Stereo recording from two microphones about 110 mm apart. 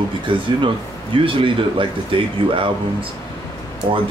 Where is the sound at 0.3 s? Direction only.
50° right (ahead or behind).